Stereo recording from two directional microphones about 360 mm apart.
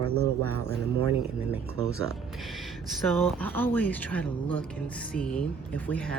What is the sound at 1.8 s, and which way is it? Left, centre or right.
Speech, centre.